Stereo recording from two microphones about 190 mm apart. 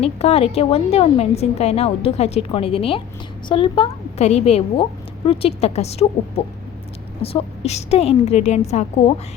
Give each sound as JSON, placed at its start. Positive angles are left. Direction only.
{"t": 0.0, "sound": "a woman's voice", "side_deg": 35}